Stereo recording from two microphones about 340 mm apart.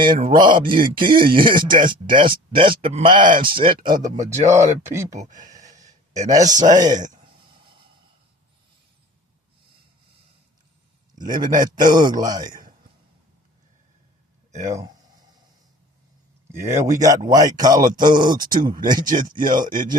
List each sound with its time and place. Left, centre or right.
0.0 s speech: centre
4.3 s speech: centre
5.2 s a sound: right
6.1 s speech: centre
11.1 s a man's voice: right
14.5 s speech: centre
16.5 s speech: centre